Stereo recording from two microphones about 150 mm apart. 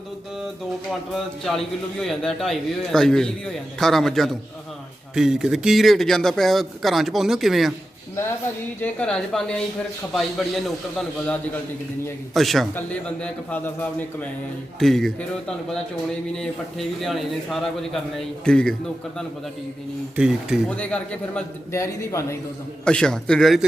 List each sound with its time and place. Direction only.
1.1 s speech: centre (ahead or behind)
8.8 s a man's voice: 5° left (ahead or behind)
20.7 s a man's voice: 10° left (ahead or behind)
21.7 s a man's voice: 20° left (ahead or behind)
22.8 s speech: 5° left (ahead or behind)